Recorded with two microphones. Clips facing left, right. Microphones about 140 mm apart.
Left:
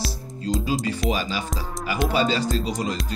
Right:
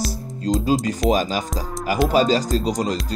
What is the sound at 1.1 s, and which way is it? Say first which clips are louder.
Music: right 6 dB; 40° right (ahead or behind).